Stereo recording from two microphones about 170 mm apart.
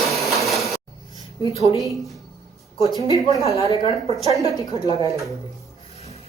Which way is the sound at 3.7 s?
30° left (ahead or behind).